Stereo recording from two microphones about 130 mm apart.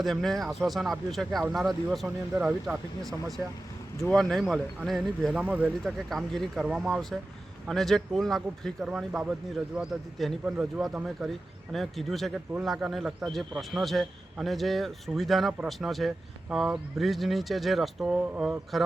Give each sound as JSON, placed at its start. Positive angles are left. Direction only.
{"t": 0.0, "sound": "a man's voice", "side_deg": 0}
{"t": 2.3, "sound": "speech", "side_deg": -15}
{"t": 2.6, "sound": "a man's voice", "side_deg": 0}
{"t": 5.8, "sound": "a man's voice", "side_deg": 0}